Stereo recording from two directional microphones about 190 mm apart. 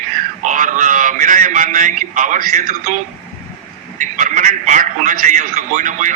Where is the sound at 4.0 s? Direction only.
40° right (ahead or behind).